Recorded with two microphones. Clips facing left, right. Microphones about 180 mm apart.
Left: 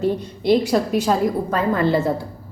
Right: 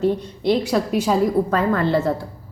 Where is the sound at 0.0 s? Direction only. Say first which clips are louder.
Right 1 dB; centre (ahead or behind).